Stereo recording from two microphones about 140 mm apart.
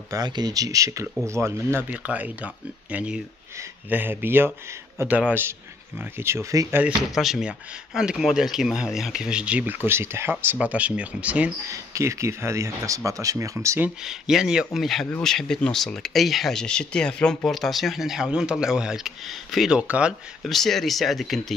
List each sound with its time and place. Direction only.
0.1 s speech: 30° right (ahead or behind)
7.0 s speech: centre (ahead or behind)
11.7 s speech: 20° right (ahead or behind)
13.8 s speech: 5° right (ahead or behind)